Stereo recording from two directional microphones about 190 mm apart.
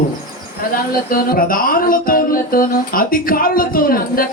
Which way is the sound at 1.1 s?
50° left (ahead or behind).